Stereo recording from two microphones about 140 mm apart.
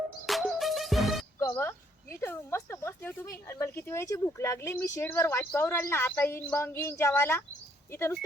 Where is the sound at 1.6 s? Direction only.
20° left (ahead or behind).